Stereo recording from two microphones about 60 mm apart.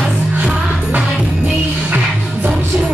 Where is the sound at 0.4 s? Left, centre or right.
Right.